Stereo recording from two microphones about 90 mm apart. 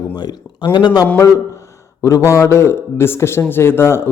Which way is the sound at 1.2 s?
35° left (ahead or behind).